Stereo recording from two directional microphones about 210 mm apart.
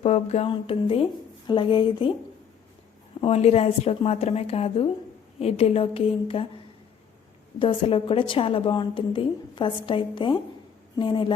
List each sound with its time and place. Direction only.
0.0 s a woman's voice: 30° left (ahead or behind)
3.2 s a woman's voice: 30° left (ahead or behind)
7.6 s a woman's voice: 25° left (ahead or behind)